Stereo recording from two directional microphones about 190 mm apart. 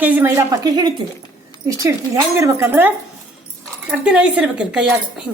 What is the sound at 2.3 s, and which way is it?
Speech, 15° right (ahead or behind).